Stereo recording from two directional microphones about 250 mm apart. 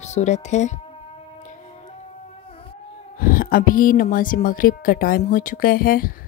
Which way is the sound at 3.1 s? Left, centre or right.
Left.